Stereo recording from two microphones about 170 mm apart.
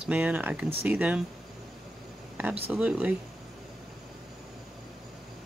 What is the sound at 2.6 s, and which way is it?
Speech, 10° right (ahead or behind).